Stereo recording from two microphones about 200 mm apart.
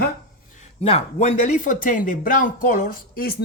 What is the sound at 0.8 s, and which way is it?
Speech, 30° left (ahead or behind).